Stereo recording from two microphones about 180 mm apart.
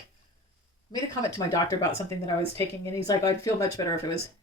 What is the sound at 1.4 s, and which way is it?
Speech, 20° left (ahead or behind).